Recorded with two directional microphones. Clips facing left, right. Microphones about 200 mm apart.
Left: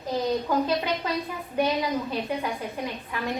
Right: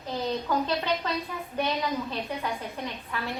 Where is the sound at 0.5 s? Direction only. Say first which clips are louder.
Left 2 dB; 15° left (ahead or behind).